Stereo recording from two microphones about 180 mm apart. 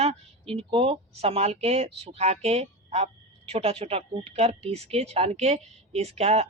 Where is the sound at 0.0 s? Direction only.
35° right (ahead or behind).